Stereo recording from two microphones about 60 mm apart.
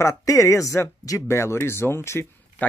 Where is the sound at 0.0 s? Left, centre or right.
Left.